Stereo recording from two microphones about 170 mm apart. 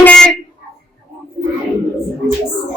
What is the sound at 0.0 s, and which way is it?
Vehicle horn, 5° left (ahead or behind).